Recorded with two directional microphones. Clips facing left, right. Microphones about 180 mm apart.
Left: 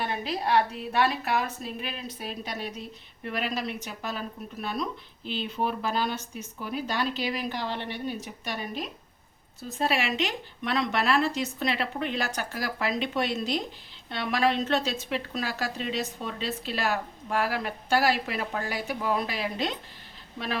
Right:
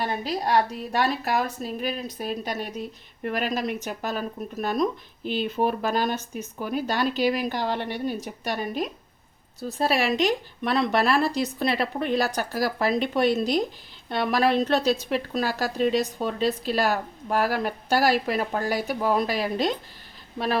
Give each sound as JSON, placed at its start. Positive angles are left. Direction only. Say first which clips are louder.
{"t": 0.0, "sound": "a woman's voice", "louder": "right 3 dB", "side_deg": -40}
{"t": 9.6, "sound": "a woman's voice", "louder": "right 4 dB", "side_deg": -35}